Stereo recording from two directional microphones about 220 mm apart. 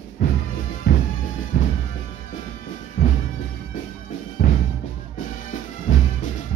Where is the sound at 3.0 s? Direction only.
50° left (ahead or behind).